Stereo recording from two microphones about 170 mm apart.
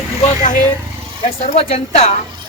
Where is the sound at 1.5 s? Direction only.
35° left (ahead or behind).